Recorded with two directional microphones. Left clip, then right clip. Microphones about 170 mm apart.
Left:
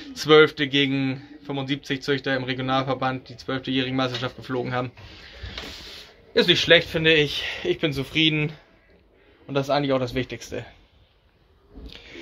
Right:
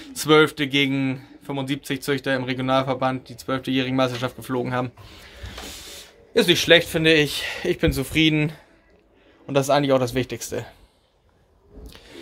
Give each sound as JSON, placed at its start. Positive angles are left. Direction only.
{"t": 0.0, "sound": "speech", "side_deg": -20}
{"t": 9.5, "sound": "speech", "side_deg": -40}
{"t": 11.9, "sound": "a sound", "side_deg": -15}